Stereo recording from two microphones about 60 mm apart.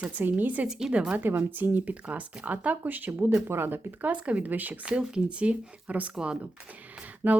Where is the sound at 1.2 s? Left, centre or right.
Right.